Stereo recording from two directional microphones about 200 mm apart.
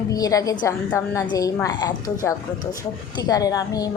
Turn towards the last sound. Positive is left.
turn(degrees=20)  # may be behind; listen again after turning